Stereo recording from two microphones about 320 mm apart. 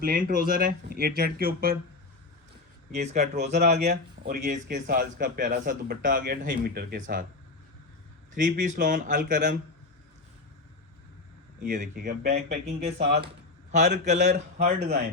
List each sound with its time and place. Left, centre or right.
0.0 s speech: right
2.9 s speech: right
8.4 s speech: right
11.6 s speech: right
12.8 s speech: centre